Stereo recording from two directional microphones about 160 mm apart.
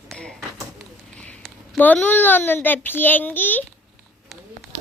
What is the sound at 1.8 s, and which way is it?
A child's voice, 10° left (ahead or behind).